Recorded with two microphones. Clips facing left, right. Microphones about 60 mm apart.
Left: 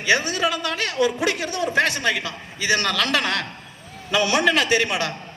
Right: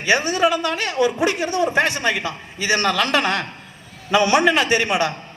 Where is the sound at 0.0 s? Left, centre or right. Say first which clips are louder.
Right 3 dB; right.